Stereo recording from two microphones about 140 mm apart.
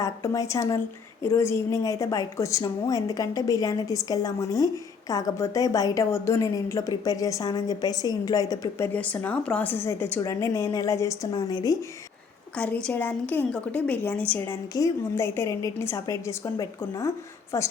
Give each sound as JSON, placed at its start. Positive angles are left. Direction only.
{"t": 0.0, "sound": "a woman's voice", "side_deg": 25}
{"t": 8.9, "sound": "a woman's voice", "side_deg": 10}
{"t": 12.5, "sound": "a woman's voice", "side_deg": 10}